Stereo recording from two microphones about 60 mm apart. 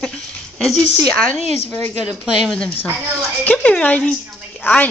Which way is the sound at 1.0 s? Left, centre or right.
Centre.